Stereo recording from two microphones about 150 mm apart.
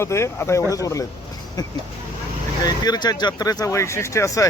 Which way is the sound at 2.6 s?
25° left (ahead or behind).